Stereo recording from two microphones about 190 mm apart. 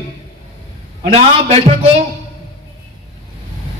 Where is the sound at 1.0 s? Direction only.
30° right (ahead or behind).